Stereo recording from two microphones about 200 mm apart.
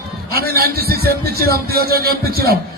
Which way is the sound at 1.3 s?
50° right (ahead or behind).